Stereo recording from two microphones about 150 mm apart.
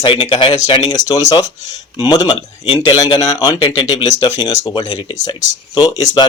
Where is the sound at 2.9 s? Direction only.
25° left (ahead or behind).